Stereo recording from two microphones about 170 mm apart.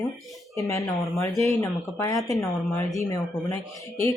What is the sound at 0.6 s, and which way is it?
Speech, 20° left (ahead or behind).